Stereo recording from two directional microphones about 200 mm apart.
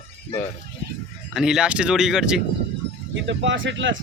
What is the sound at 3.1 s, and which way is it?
Speech, 65° right (ahead or behind).